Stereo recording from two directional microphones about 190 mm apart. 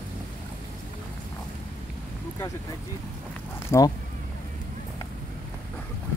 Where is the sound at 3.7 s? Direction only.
15° left (ahead or behind).